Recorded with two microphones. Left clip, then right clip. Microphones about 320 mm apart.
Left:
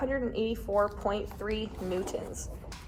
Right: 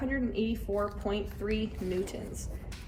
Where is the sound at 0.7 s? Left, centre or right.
Centre.